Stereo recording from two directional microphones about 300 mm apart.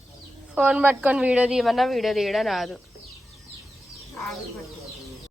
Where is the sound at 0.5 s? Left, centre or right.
Centre.